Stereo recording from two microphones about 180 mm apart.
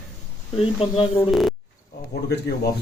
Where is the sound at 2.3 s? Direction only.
60° left (ahead or behind).